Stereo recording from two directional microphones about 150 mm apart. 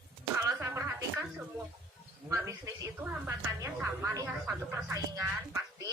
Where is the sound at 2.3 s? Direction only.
20° right (ahead or behind).